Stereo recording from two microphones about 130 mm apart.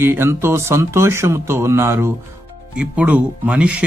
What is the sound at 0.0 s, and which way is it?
Speech, 20° right (ahead or behind).